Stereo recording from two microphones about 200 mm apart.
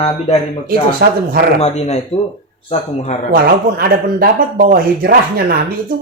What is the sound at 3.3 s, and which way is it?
Speech, 50° right (ahead or behind).